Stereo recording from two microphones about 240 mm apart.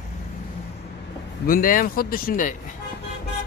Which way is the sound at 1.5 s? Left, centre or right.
Left.